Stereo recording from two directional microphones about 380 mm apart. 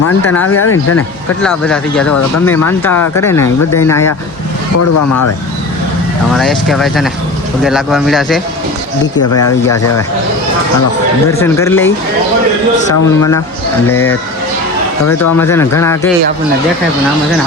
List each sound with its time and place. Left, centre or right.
0.4 s speech: left
1.4 s speech: centre
4.8 s speech: left
6.3 s speech: centre
9.4 s speech: centre
11.3 s speech: centre
13.1 s speech: centre
15.0 s speech: left
15.4 s speech: centre